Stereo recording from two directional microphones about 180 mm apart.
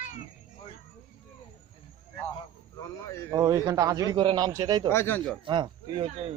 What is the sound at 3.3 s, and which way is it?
A man's voice, 20° right (ahead or behind).